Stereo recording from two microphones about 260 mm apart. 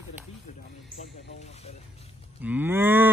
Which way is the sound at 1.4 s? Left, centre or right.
Left.